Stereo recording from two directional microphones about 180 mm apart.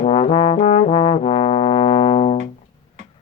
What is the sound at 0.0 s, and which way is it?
Trombone, 30° left (ahead or behind).